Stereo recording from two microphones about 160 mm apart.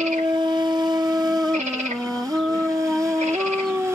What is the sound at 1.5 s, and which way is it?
Music, 45° right (ahead or behind).